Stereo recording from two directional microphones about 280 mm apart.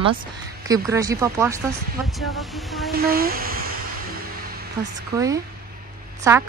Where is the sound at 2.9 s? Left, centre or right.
Right.